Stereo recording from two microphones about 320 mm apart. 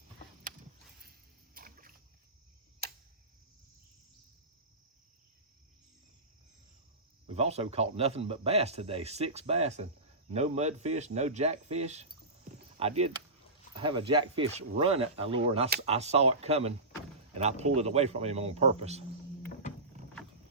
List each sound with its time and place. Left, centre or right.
1.5 s rowboat: right
2.8 s tick-tock: right
7.3 s speech: centre